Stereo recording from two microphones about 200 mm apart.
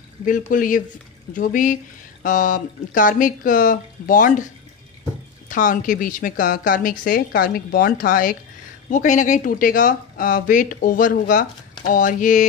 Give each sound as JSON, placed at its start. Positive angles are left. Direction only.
{"t": 0.5, "sound": "a woman's voice", "side_deg": 40}
{"t": 5.5, "sound": "a woman's voice", "side_deg": 40}